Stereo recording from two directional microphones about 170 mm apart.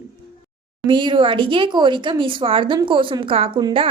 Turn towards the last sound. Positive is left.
turn(degrees=-30)  # may be behind; listen again after turning